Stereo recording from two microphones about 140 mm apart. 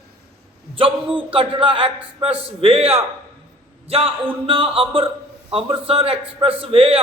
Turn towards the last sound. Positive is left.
turn(degrees=-40)  # may be behind; listen again after turning